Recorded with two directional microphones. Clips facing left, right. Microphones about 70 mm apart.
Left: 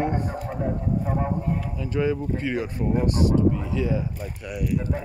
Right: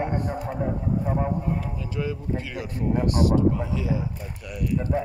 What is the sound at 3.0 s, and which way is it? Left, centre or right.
Speech, left.